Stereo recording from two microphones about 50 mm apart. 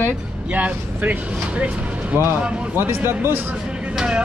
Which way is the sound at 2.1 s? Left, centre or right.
Right.